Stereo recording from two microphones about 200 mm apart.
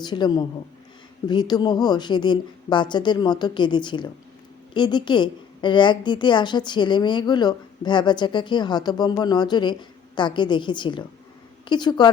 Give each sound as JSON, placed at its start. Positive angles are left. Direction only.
{"t": 0.0, "sound": "a woman's voice", "side_deg": 20}